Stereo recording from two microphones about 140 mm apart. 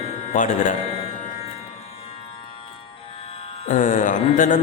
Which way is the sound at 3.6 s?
65° left (ahead or behind).